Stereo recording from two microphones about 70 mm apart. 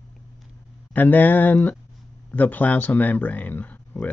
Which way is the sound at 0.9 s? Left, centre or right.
Left.